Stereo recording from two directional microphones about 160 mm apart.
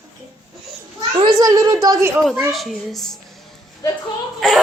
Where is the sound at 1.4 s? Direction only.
20° right (ahead or behind).